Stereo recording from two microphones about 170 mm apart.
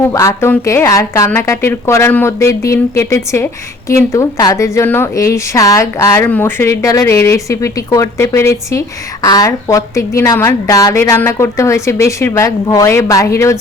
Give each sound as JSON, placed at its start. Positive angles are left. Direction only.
{"t": 0.1, "sound": "a woman's voice", "side_deg": 20}